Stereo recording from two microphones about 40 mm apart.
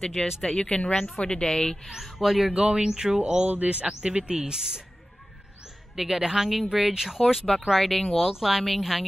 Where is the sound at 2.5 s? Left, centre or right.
Right.